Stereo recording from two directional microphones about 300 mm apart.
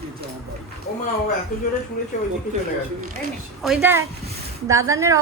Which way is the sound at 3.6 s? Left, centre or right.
Centre.